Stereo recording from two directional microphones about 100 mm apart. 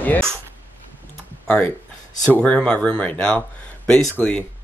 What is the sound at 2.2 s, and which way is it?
Speech, 10° left (ahead or behind).